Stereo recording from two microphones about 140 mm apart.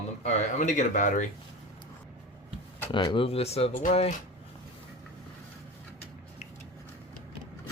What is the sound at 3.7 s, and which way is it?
Speech, 65° left (ahead or behind).